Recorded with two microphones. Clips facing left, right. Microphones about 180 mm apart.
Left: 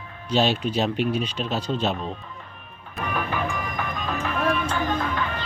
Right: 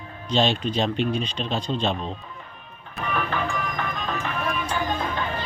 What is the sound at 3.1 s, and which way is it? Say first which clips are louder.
Music: right 1 dB; 10° left (ahead or behind).